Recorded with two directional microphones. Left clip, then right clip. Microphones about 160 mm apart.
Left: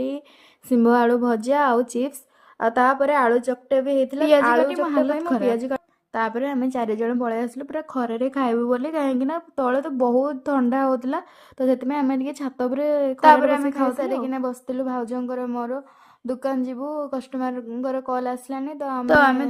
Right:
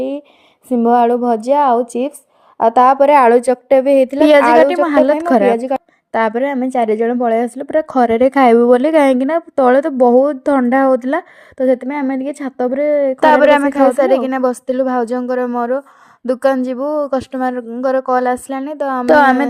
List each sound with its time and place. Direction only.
0.7 s a woman's voice: 20° right (ahead or behind)
2.6 s speech: 35° right (ahead or behind); by 5.1 s 50° right (ahead or behind)
5.4 s a woman's voice: 35° right (ahead or behind)
13.1 s a woman's voice: 60° right (ahead or behind)